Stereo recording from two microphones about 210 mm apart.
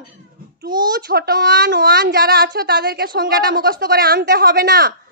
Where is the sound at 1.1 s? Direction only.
45° right (ahead or behind).